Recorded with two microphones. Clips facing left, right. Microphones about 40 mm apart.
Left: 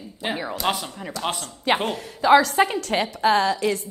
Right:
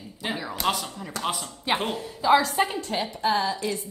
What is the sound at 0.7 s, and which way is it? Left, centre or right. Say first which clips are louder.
Speech: even; centre.